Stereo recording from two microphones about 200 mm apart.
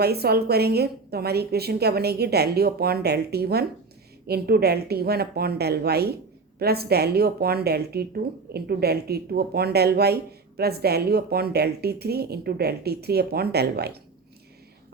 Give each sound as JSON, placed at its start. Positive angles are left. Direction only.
{"t": 0.0, "sound": "a woman's voice", "side_deg": -50}